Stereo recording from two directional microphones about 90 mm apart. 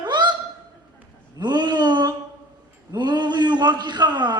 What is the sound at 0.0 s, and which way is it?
Honk, 55° right (ahead or behind).